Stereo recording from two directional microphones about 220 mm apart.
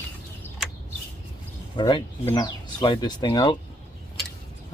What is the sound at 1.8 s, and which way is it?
Speech, 20° left (ahead or behind).